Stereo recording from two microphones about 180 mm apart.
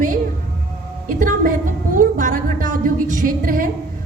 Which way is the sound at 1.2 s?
45° right (ahead or behind).